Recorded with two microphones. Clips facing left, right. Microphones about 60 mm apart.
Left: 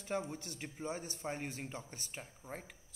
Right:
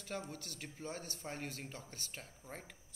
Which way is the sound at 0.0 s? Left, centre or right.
Left.